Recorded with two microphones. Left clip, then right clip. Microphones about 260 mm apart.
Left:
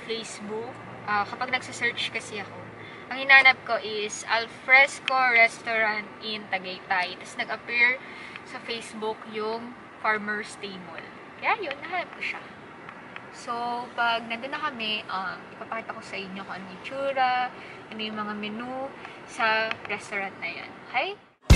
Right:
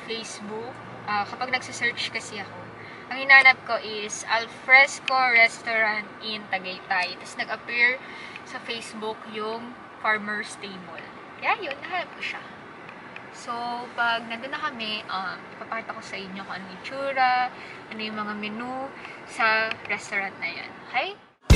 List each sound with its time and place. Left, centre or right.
1.0 s a woman's voice: centre
13.5 s a woman's voice: centre
18.1 s a woman's voice: centre